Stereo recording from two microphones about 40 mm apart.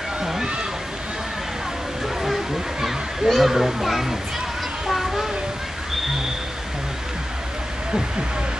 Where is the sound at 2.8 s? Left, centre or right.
Centre.